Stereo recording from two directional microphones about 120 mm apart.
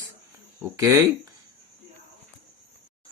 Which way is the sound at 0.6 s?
25° right (ahead or behind).